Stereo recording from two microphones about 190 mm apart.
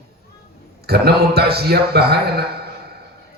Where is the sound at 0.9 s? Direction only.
60° right (ahead or behind).